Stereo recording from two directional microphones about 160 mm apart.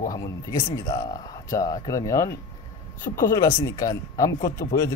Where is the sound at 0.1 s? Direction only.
20° left (ahead or behind).